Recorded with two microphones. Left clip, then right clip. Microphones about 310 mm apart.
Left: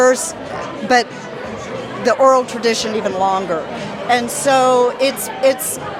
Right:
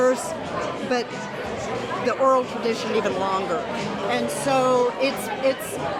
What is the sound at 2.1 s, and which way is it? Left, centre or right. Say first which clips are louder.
A woman's voice: left 8 dB; left.